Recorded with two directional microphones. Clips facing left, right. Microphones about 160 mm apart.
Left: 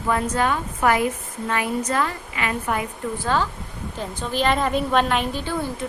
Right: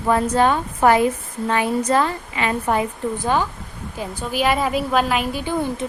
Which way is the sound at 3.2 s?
15° right (ahead or behind).